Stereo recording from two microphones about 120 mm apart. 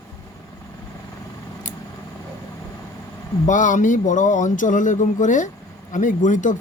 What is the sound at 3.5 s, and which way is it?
Speech, 90° left.